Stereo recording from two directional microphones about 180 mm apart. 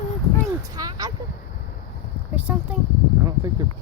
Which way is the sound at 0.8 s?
20° right (ahead or behind).